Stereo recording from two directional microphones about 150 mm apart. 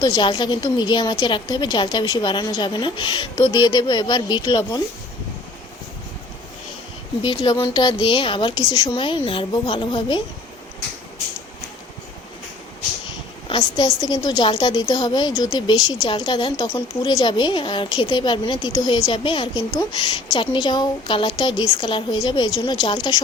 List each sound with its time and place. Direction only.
0.0 s speech: 30° left (ahead or behind)
7.2 s speech: 30° left (ahead or behind)
13.5 s a woman's voice: 35° left (ahead or behind)